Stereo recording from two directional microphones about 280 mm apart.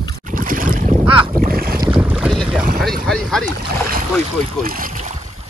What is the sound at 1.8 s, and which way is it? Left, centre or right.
Boat, centre.